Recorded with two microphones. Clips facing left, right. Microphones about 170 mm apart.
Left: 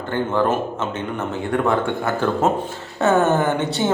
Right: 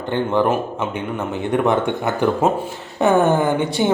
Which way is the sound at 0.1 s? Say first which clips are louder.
Right 2 dB; 15° right (ahead or behind).